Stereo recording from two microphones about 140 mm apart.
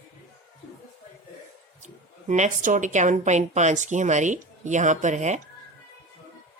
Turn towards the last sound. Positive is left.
turn(degrees=-55)  # may be behind; listen again after turning